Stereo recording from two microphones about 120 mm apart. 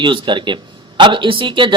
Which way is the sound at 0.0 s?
40° right (ahead or behind).